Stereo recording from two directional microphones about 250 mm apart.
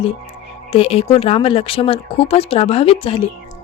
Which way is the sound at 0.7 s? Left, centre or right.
Left.